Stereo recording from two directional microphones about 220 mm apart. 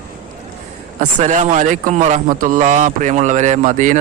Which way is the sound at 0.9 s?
35° right (ahead or behind).